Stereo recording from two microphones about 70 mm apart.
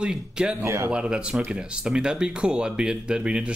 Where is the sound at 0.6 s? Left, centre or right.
Right.